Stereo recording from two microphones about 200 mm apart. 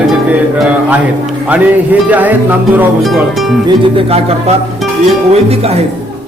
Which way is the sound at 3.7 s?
30° right (ahead or behind).